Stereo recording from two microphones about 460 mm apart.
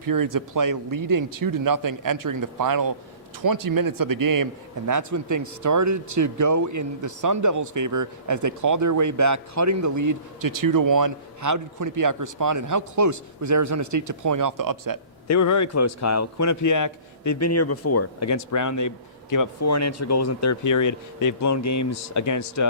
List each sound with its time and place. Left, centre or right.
0.0 s speech: right
15.3 s a man's voice: left